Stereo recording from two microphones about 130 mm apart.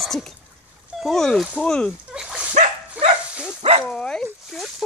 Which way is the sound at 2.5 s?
60° right (ahead or behind).